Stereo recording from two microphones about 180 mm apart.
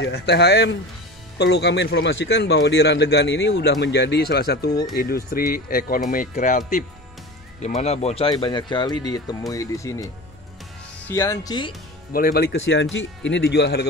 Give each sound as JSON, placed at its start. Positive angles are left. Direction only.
{"t": 0.0, "sound": "speech", "side_deg": 65}
{"t": 7.6, "sound": "speech", "side_deg": 35}
{"t": 11.1, "sound": "speech", "side_deg": 15}
{"t": 12.1, "sound": "speech", "side_deg": 55}